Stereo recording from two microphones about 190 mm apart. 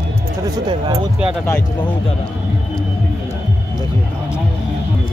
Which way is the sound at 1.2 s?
5° right (ahead or behind).